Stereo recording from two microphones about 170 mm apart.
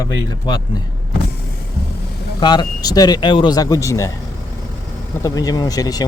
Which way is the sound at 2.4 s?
25° left (ahead or behind).